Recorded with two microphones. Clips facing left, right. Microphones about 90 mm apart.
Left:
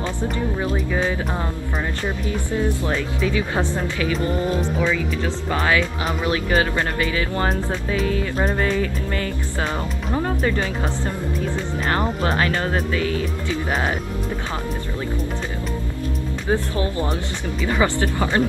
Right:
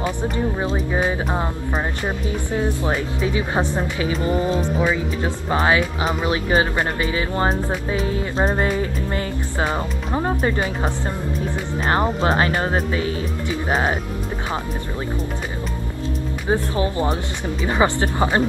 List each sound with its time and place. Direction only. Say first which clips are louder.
0.0 s speech: right 2 dB; 20° right (ahead or behind)
16.4 s speech: right 1 dB; 25° right (ahead or behind)